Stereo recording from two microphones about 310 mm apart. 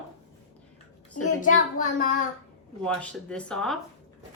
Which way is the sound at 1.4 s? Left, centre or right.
Left.